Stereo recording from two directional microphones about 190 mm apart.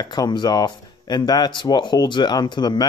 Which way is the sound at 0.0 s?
20° left (ahead or behind).